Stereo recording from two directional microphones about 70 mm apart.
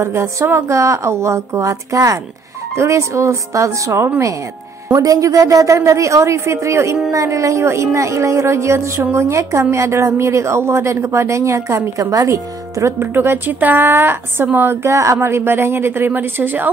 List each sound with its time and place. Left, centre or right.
0.0 s a woman's voice: right
13.0 s speech: right
14.9 s a woman's voice: right
15.1 s speech: right